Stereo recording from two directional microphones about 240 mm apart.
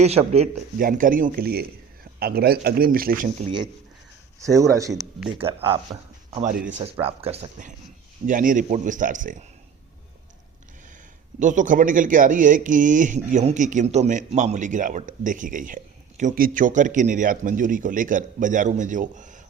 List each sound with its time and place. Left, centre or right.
0.0 s speech: right
4.4 s speech: centre
6.5 s speech: right
6.9 s speech: right
11.3 s speech: right